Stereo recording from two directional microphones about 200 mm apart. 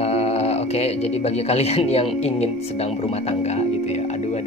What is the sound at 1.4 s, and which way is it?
Speech, 30° left (ahead or behind).